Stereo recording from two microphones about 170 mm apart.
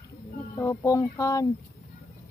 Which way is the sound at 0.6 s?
15° left (ahead or behind).